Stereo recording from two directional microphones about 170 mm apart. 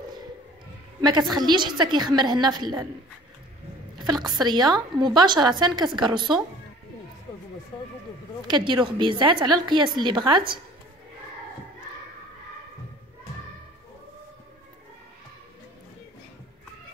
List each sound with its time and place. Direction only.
1.3 s a woman's voice: 25° right (ahead or behind)
4.0 s a woman's voice: 25° right (ahead or behind)
8.5 s a woman's voice: 25° right (ahead or behind)